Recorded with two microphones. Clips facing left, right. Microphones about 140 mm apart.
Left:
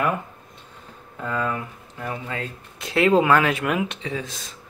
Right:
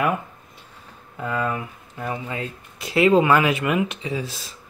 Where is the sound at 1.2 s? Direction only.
10° right (ahead or behind).